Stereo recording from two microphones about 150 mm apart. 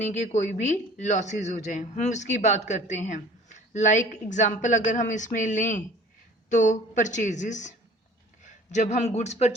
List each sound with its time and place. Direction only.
0.0 s a man's voice: 55° left (ahead or behind)